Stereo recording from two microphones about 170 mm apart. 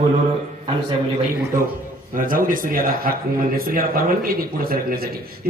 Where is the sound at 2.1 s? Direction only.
55° right (ahead or behind).